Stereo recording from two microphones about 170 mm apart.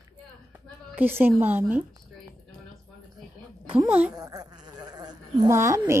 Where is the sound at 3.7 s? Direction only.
10° right (ahead or behind).